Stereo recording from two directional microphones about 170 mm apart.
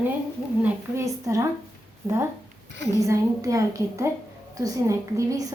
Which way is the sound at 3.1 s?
20° right (ahead or behind).